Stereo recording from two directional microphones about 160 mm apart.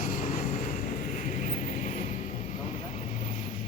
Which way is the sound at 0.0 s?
50° left (ahead or behind).